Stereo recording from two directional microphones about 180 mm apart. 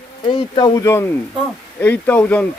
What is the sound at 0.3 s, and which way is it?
A man's voice, 25° left (ahead or behind).